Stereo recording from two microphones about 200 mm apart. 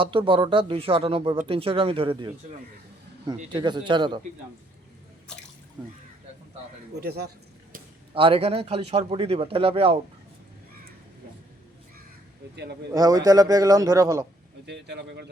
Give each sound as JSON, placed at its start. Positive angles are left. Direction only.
{"t": 0.0, "sound": "speech", "side_deg": -25}
{"t": 3.5, "sound": "speech", "side_deg": -20}
{"t": 5.3, "sound": "speech", "side_deg": 5}
{"t": 6.9, "sound": "speech", "side_deg": -55}
{"t": 8.1, "sound": "speech", "side_deg": -25}
{"t": 12.9, "sound": "a man's voice", "side_deg": -20}
{"t": 14.7, "sound": "speech", "side_deg": -55}